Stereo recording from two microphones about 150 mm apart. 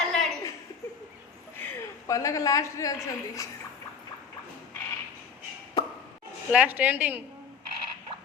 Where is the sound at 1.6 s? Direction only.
20° left (ahead or behind).